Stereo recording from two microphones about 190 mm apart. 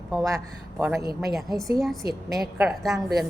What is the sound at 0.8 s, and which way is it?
Speech, 15° right (ahead or behind).